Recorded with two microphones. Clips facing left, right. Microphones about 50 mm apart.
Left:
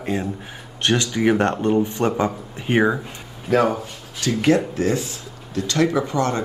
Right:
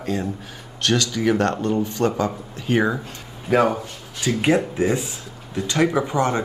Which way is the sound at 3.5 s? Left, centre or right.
Centre.